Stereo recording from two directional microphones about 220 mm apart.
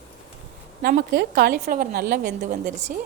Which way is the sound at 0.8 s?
45° right (ahead or behind).